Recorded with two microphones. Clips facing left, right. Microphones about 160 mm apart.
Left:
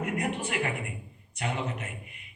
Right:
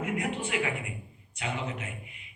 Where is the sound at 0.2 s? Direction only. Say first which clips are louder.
Left 1 dB; 40° left (ahead or behind).